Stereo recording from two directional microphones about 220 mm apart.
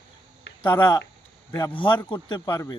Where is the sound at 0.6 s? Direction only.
10° left (ahead or behind).